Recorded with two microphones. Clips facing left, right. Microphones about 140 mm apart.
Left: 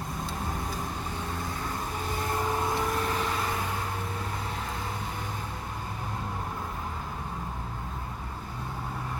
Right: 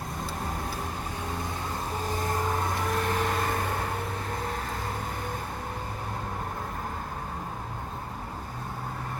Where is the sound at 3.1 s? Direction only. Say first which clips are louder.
Right 2 dB; 50° right (ahead or behind).